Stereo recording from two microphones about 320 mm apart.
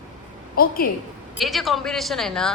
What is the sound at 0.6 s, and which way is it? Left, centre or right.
Speech, left.